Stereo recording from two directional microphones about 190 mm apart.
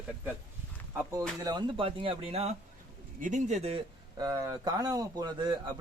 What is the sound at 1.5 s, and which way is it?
Speech, 25° right (ahead or behind).